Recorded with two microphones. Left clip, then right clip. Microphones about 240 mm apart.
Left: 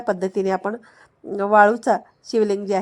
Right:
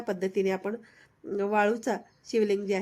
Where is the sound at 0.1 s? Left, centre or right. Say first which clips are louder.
Left 7 dB; centre.